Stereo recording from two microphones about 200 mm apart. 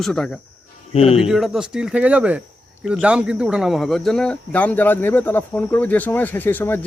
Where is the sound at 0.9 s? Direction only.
30° left (ahead or behind).